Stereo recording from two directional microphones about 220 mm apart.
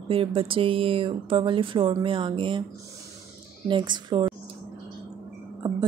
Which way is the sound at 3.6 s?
20° right (ahead or behind).